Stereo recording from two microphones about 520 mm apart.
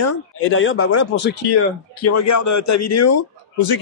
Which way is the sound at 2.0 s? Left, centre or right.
Left.